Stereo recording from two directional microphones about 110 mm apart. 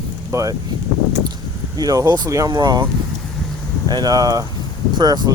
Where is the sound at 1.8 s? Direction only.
35° right (ahead or behind).